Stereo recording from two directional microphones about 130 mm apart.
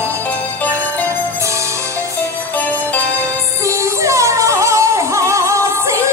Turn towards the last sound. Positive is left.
turn(degrees=-25)  # may be behind; listen again after turning